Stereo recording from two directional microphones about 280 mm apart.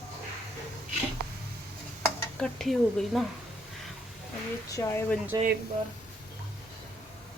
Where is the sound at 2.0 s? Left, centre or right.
Centre.